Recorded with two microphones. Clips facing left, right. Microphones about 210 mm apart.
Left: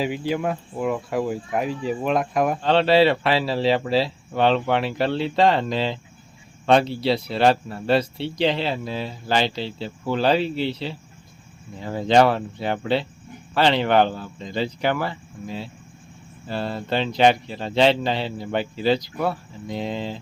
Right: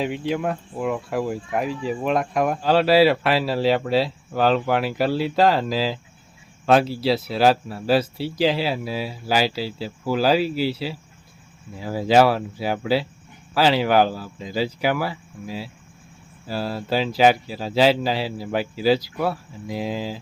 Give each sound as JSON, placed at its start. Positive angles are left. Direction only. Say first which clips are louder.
{"t": 0.0, "sound": "speech", "louder": "even", "side_deg": 0}